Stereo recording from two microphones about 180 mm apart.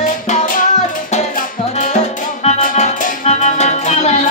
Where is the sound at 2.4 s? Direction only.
40° left (ahead or behind).